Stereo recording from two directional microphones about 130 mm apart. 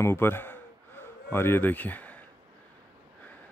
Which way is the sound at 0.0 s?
20° left (ahead or behind).